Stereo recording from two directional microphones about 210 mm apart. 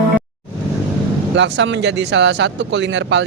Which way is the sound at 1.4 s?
60° right (ahead or behind).